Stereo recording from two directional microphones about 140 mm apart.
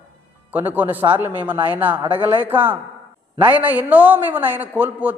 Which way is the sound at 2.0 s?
35° right (ahead or behind).